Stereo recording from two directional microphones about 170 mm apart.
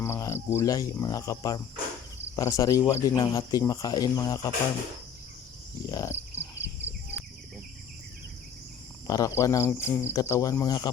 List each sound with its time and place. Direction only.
0.0 s cricket: 15° left (ahead or behind)
1.0 s speech: 20° left (ahead or behind)
5.8 s speech: 20° left (ahead or behind)
6.4 s cricket: 15° left (ahead or behind)
9.0 s speech: 20° left (ahead or behind)